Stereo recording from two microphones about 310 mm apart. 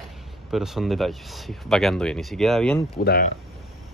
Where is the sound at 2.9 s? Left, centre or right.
Left.